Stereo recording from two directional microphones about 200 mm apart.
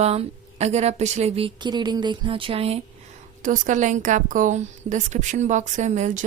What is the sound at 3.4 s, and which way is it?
A woman's voice, 40° right (ahead or behind).